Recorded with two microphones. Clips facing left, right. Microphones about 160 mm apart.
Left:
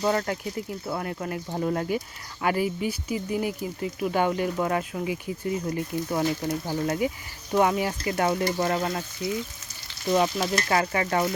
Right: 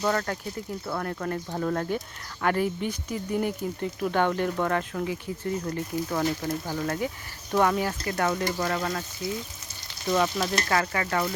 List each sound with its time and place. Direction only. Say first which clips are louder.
0.0 s speech: left 2 dB; 15° left (ahead or behind)
7.5 s frying: left 1 dB; 15° left (ahead or behind)